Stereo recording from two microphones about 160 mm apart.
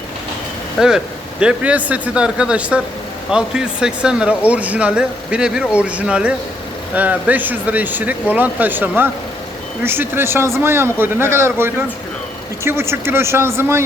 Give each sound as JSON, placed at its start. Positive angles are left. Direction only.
{"t": 0.8, "sound": "speech", "side_deg": -5}